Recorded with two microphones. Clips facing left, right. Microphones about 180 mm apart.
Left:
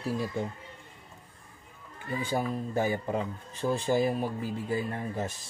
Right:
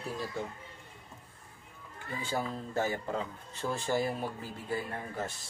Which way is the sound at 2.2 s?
15° left (ahead or behind).